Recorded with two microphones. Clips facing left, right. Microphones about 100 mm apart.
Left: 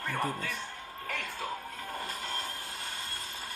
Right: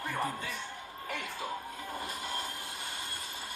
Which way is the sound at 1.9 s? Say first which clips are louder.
Even; 15° right (ahead or behind).